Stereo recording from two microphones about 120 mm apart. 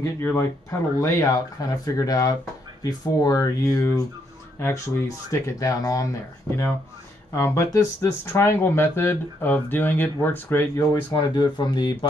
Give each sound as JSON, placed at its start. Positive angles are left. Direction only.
{"t": 0.0, "sound": "speech", "side_deg": 20}
{"t": 7.3, "sound": "speech", "side_deg": 25}